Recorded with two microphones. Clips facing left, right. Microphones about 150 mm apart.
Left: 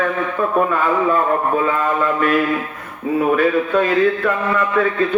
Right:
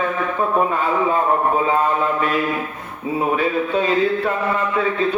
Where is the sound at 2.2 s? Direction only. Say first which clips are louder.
Left 3 dB; 55° left (ahead or behind).